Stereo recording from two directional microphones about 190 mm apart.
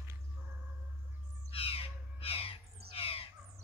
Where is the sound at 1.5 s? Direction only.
30° left (ahead or behind).